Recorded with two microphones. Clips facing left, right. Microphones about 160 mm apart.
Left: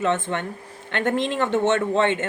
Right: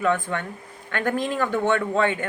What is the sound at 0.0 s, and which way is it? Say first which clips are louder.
Speech: even; 25° left (ahead or behind).